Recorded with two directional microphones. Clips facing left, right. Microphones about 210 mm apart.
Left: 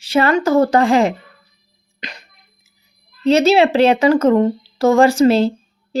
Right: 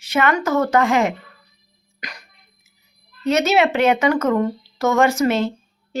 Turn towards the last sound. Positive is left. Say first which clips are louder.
# left 6 dB
turn(degrees=35)  # may be behind; listen again after turning